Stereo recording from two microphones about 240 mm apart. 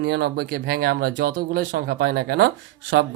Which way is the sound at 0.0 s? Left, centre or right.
Right.